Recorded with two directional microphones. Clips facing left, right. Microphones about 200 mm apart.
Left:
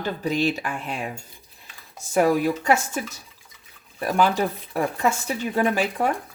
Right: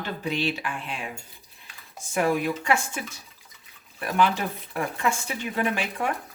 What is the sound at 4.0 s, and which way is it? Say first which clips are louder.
Speech: left 3 dB; 40° left (ahead or behind).